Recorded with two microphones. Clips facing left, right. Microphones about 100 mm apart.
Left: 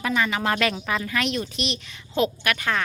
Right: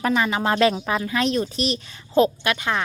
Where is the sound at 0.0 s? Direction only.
30° right (ahead or behind).